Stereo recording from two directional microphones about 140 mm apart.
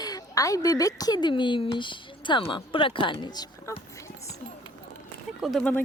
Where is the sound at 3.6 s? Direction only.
20° left (ahead or behind).